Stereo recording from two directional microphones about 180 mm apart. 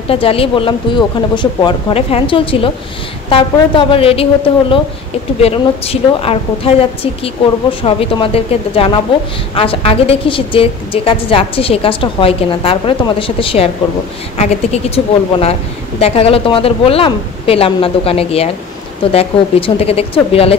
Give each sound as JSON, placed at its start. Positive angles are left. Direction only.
{"t": 0.1, "sound": "a woman's voice", "side_deg": 30}
{"t": 16.0, "sound": "a woman's voice", "side_deg": 30}